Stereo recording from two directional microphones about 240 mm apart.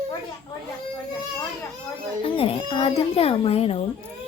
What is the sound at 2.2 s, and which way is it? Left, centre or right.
A child's voice, left.